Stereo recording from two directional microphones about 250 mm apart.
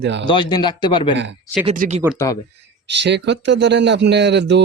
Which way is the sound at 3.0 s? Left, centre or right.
Right.